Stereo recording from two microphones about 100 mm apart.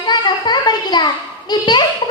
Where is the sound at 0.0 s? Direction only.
45° left (ahead or behind).